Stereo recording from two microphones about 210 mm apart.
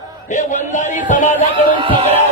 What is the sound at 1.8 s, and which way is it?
Speech, 25° right (ahead or behind).